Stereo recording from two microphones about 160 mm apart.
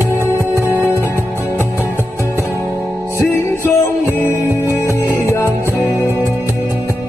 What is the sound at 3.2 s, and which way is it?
Music, 15° left (ahead or behind).